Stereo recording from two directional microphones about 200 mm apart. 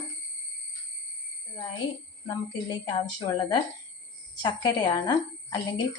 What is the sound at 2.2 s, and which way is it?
A woman's voice, 20° left (ahead or behind).